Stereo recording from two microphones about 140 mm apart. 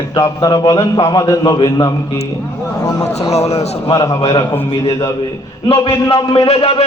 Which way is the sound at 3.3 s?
50° left (ahead or behind).